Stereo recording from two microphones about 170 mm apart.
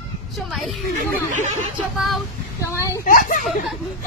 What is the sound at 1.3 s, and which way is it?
Speech, 45° right (ahead or behind).